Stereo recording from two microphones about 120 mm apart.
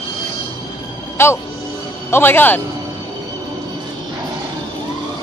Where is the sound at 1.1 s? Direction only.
20° left (ahead or behind).